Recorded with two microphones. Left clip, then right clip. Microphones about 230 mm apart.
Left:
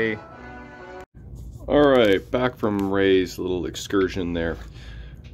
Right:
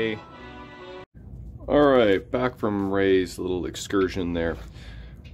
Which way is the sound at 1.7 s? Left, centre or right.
Centre.